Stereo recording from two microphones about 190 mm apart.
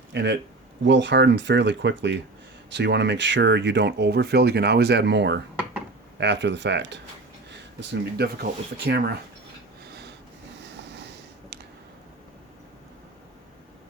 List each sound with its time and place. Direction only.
0.1 s speech: 65° right (ahead or behind)
10.6 s waves: 65° right (ahead or behind)